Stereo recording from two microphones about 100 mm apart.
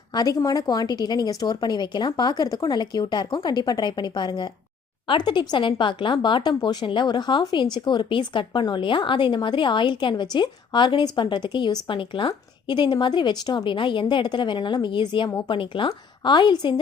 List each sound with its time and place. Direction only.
0.1 s a woman's voice: 40° left (ahead or behind)